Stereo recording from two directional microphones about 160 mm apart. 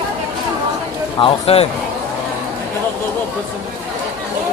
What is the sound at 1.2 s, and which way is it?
Speech, 35° left (ahead or behind).